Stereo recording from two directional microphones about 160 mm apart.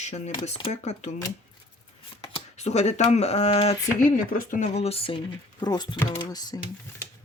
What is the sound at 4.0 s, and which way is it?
Speech, 55° left (ahead or behind).